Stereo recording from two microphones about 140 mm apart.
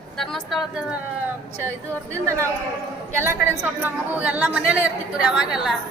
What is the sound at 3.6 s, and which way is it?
A woman's voice, 15° right (ahead or behind).